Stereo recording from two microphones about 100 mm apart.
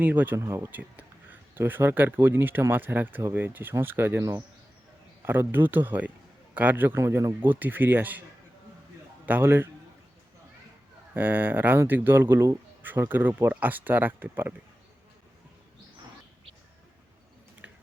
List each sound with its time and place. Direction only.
0.0 s speech: 20° right (ahead or behind)
0.3 s speech: 30° right (ahead or behind)
9.2 s speech: 20° right (ahead or behind)
11.1 s speech: 20° right (ahead or behind)
17.6 s a sound: 15° right (ahead or behind)